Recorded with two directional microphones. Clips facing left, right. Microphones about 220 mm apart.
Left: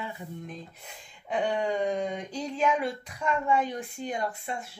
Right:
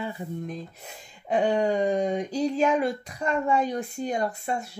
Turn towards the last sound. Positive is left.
turn(degrees=-40)  # may be behind; listen again after turning